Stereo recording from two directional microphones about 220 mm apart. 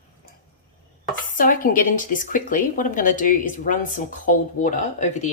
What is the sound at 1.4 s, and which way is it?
Speech, 40° left (ahead or behind).